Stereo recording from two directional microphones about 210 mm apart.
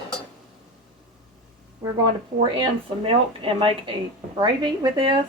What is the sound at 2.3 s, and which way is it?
Speech, 40° right (ahead or behind).